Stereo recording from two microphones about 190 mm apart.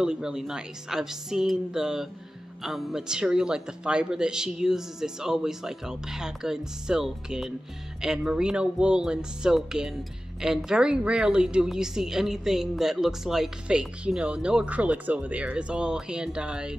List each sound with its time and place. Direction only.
0.0 s a woman's voice: 5° right (ahead or behind)